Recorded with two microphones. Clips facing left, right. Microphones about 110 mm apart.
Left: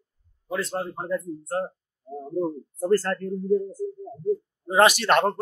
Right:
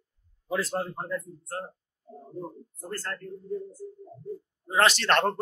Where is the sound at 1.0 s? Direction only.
15° left (ahead or behind).